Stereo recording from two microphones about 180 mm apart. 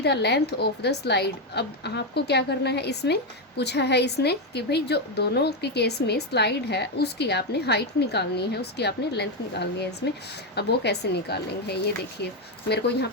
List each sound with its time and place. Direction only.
0.0 s a woman's voice: 65° left (ahead or behind)